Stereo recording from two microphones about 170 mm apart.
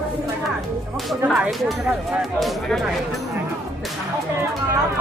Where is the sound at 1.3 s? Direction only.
Centre (ahead or behind).